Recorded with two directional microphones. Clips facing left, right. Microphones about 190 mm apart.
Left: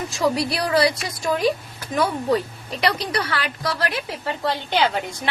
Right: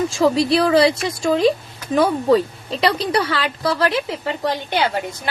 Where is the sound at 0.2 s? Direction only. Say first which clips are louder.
Right 5 dB; 25° right (ahead or behind).